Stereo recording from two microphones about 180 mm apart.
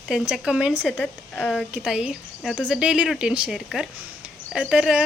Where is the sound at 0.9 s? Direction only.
5° left (ahead or behind).